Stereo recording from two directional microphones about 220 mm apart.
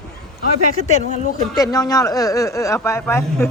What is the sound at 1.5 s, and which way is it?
Speech, 15° left (ahead or behind).